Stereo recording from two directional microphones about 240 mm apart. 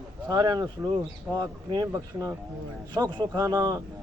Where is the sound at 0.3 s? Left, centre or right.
Centre.